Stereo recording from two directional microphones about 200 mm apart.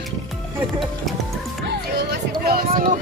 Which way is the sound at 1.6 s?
55° right (ahead or behind).